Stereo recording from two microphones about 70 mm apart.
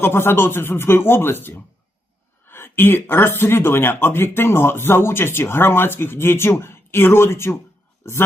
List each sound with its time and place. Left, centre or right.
0.0 s speech: left